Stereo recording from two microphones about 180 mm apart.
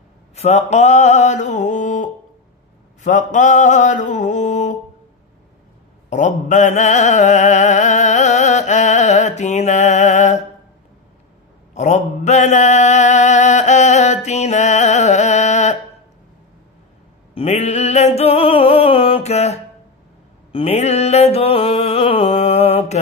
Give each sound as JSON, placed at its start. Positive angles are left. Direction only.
{"t": 0.4, "sound": "mantra", "side_deg": 40}
{"t": 6.0, "sound": "mantra", "side_deg": 40}
{"t": 11.7, "sound": "mantra", "side_deg": 40}
{"t": 17.3, "sound": "a sound", "side_deg": 35}
{"t": 20.5, "sound": "mantra", "side_deg": 35}